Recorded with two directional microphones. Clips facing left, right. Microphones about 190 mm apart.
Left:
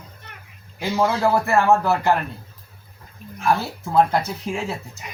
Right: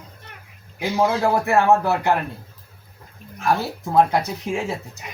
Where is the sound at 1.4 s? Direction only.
20° right (ahead or behind).